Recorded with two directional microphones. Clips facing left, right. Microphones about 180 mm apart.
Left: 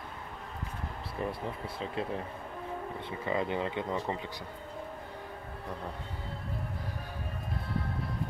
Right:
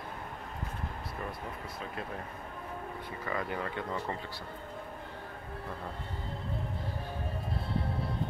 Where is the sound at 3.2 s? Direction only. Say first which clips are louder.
Left 4 dB; 25° left (ahead or behind).